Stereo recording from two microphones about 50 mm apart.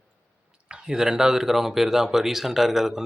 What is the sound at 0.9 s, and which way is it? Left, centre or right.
Speech, centre.